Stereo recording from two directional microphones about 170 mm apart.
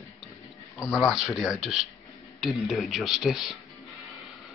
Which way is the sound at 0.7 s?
20° left (ahead or behind).